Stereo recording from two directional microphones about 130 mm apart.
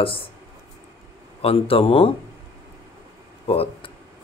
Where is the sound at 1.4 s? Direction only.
45° left (ahead or behind).